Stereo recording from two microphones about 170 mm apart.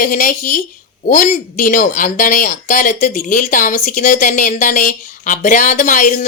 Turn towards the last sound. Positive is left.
turn(degrees=50)  # may be behind; listen again after turning